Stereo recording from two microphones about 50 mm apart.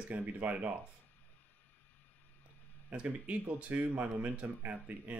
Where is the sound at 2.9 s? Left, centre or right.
Right.